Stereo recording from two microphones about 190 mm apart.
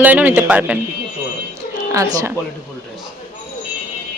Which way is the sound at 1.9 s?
15° right (ahead or behind).